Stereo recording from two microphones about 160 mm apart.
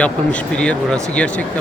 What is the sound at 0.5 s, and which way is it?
Speech, 5° left (ahead or behind).